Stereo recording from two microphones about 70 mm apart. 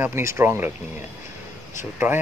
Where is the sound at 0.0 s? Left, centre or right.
Right.